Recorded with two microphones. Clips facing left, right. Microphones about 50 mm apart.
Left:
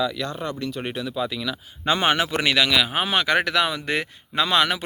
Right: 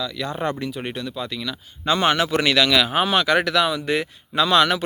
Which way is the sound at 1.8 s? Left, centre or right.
Centre.